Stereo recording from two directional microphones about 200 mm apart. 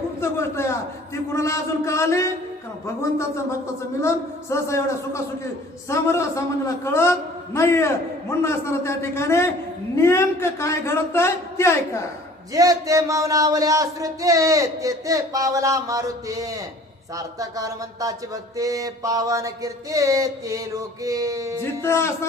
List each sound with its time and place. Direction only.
0.2 s a man's voice: 15° left (ahead or behind)
12.5 s speech: 15° right (ahead or behind)
21.6 s a man's voice: 15° left (ahead or behind)